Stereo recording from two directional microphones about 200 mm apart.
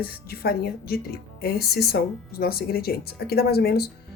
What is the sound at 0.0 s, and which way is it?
Speech, 50° left (ahead or behind).